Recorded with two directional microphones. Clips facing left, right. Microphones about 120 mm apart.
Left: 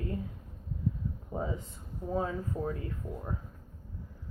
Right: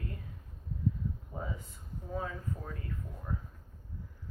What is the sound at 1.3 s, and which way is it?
Air conditioning, 25° left (ahead or behind).